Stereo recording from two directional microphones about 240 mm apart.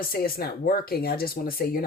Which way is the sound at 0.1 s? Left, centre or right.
Left.